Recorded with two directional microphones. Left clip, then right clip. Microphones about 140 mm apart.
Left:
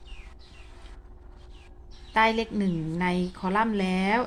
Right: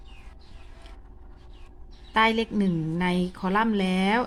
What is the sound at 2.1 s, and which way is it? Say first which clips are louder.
A woman's voice: right 1 dB; 25° right (ahead or behind).